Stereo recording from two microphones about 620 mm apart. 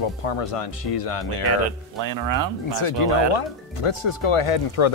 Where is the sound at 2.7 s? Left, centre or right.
Left.